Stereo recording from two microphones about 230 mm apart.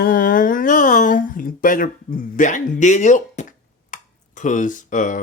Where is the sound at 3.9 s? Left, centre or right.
Left.